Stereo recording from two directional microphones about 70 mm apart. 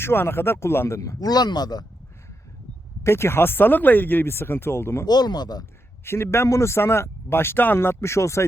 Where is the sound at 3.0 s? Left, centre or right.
Left.